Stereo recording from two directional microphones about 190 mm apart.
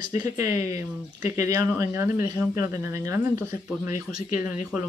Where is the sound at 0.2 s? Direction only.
15° right (ahead or behind).